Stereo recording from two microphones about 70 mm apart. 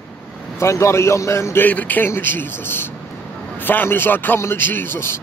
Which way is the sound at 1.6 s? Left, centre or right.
Left.